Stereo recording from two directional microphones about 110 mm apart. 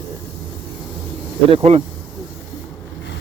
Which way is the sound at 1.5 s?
65° right (ahead or behind).